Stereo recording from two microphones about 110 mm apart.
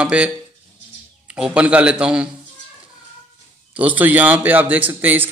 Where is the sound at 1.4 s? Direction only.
10° right (ahead or behind).